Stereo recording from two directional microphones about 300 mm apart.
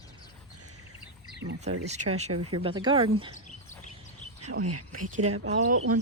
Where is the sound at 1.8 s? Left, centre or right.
Right.